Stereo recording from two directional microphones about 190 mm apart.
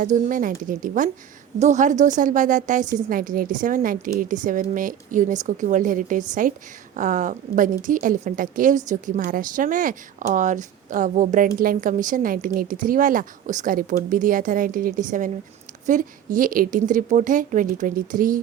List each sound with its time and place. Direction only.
0.0 s a woman's voice: 45° right (ahead or behind)